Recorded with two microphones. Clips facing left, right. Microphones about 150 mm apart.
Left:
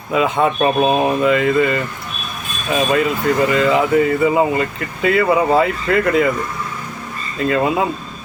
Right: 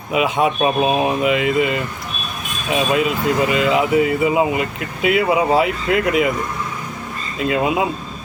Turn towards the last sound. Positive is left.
turn(degrees=-15)  # may be behind; listen again after turning